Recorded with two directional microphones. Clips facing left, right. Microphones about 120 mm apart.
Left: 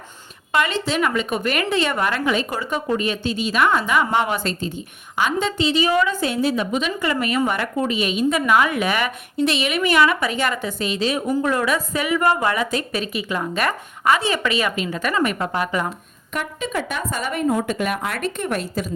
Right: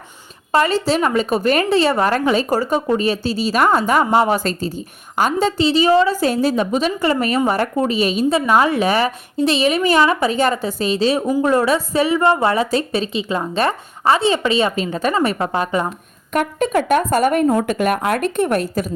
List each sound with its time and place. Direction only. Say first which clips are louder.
0.5 s a woman's voice: right 5 dB; 35° right (ahead or behind)
16.3 s speech: right 8 dB; 55° right (ahead or behind)